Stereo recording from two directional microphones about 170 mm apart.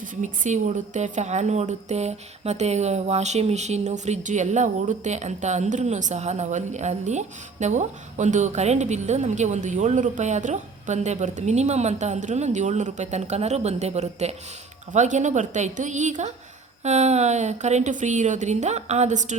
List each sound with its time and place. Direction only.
0.0 s a woman's voice: 50° right (ahead or behind)